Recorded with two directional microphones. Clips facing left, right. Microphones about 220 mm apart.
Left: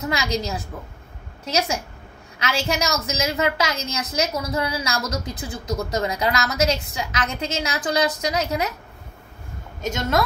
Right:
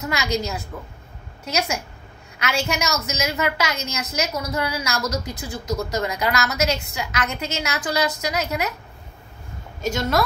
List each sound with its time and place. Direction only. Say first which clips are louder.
0.1 s a woman's voice: right 2 dB; 30° left (ahead or behind)